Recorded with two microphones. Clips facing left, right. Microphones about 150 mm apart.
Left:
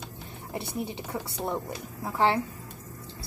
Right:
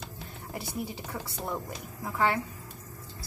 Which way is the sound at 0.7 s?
20° left (ahead or behind).